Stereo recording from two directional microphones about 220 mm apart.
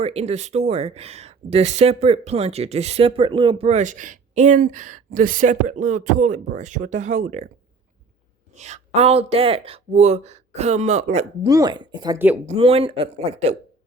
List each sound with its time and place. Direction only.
0.0 s speech: 30° right (ahead or behind)
8.5 s speech: 30° right (ahead or behind)
11.4 s speech: 15° right (ahead or behind)
12.5 s speech: 25° right (ahead or behind)